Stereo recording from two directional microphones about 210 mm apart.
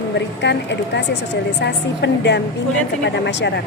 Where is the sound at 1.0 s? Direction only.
55° left (ahead or behind).